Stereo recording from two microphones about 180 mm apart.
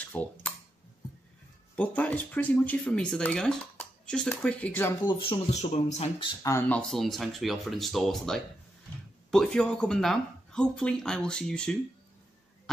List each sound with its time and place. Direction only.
0.0 s typing: 5° left (ahead or behind)
1.8 s speech: 10° left (ahead or behind)
5.0 s speech: 30° left (ahead or behind)
6.4 s speech: 15° left (ahead or behind)
6.8 s speech: centre (ahead or behind)